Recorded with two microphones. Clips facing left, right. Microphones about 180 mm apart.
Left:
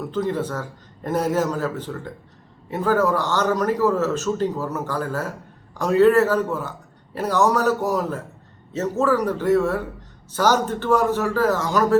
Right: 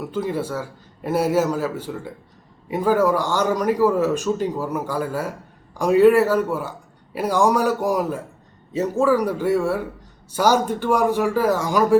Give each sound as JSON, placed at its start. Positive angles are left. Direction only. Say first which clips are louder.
{"t": 0.0, "sound": "a man's voice", "louder": "left 1 dB", "side_deg": -10}